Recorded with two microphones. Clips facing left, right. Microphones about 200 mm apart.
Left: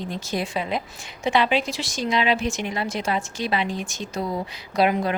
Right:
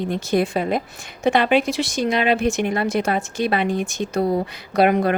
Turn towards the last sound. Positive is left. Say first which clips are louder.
# right 4 dB
turn(degrees=-60)  # may be behind; listen again after turning